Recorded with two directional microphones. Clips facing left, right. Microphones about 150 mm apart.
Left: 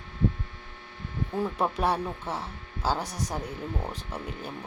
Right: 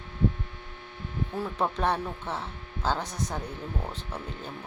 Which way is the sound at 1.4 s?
10° left (ahead or behind).